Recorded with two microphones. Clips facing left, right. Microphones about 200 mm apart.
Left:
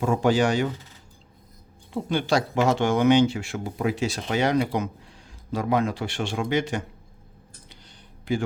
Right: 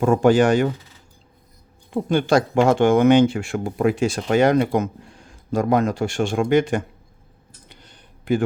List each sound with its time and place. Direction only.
0.0 s speech: 50° right (ahead or behind)
1.9 s speech: 50° right (ahead or behind)
7.7 s a sound: 55° right (ahead or behind)